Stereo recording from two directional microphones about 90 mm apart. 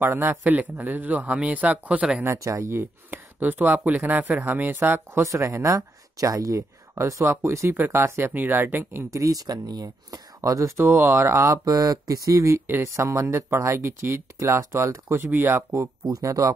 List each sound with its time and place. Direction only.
0.0 s speech: 25° right (ahead or behind)
2.2 s speech: 35° right (ahead or behind)